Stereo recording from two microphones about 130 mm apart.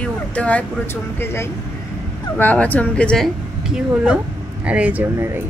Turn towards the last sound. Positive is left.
turn(degrees=-15)  # may be behind; listen again after turning